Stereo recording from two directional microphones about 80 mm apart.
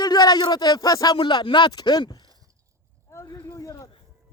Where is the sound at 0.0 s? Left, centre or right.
Left.